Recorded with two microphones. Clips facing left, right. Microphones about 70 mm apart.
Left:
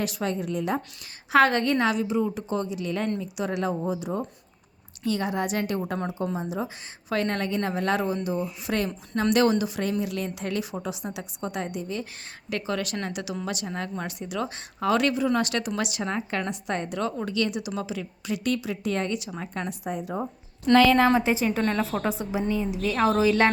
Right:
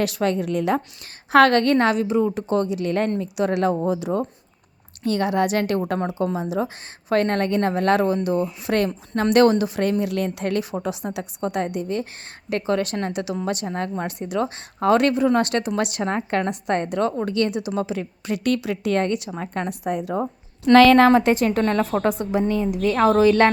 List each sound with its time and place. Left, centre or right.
0.0 s speech: right
1.3 s speech: right
5.0 s speech: right
6.1 s speech: right
7.1 s a woman's voice: right
12.5 s a woman's voice: right
19.9 s speech: right
21.1 s speech: right
21.7 s a woman's voice: centre
22.1 s speech: right
23.1 s a woman's voice: centre